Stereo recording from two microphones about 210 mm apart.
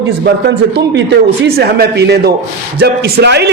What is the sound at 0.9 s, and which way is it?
A man's voice, 50° right (ahead or behind).